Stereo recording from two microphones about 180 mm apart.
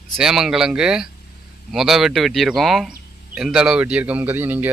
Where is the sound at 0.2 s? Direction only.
5° right (ahead or behind).